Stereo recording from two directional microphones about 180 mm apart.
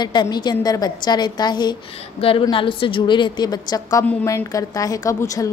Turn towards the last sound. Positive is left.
turn(degrees=20)  # may be behind; listen again after turning